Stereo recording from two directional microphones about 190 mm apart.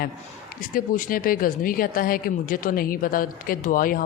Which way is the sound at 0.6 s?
45° left (ahead or behind).